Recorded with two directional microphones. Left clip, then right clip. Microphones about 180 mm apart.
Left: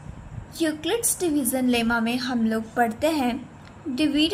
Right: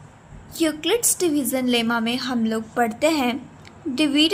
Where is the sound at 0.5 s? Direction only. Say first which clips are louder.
Right 4 dB; 25° right (ahead or behind).